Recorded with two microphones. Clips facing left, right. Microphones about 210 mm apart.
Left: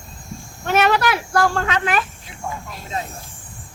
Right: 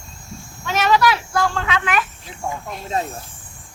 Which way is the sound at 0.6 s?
55° left (ahead or behind).